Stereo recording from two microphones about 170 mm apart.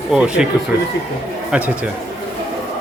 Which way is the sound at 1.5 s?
10° right (ahead or behind).